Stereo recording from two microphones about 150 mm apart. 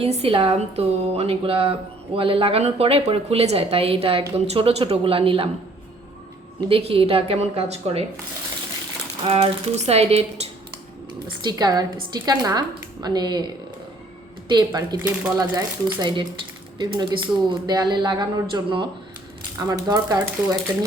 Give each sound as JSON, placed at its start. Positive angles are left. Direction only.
{"t": 0.0, "sound": "speech", "side_deg": -40}
{"t": 6.7, "sound": "speech", "side_deg": -40}
{"t": 9.2, "sound": "speech", "side_deg": -45}
{"t": 11.4, "sound": "speech", "side_deg": -25}
{"t": 14.5, "sound": "speech", "side_deg": -30}